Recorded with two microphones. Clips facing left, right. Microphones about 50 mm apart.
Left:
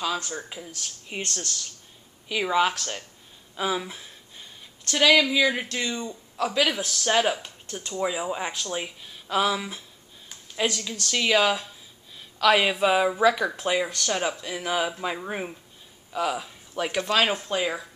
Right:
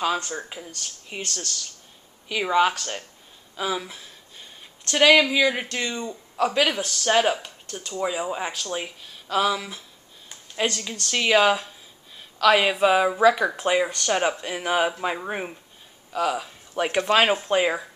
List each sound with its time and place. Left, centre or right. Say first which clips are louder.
0.7 s speech: even; centre
2.2 s speech: right 2 dB; centre
4.9 s speech: right 3 dB; centre
7.7 s speech: right 1 dB; centre
10.5 s a sound: right 1 dB; centre
11.1 s speech: right 3 dB; centre
14.1 s speech: right 5 dB; right; by 16.5 s centre
16.7 s speech: right 4 dB; right